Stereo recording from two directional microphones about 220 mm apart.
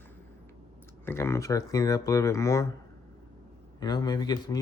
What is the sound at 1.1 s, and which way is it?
Speech, 10° left (ahead or behind).